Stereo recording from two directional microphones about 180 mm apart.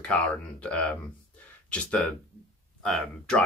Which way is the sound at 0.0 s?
5° left (ahead or behind).